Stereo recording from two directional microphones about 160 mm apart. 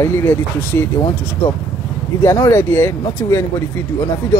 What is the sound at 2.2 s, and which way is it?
Speech, 20° left (ahead or behind).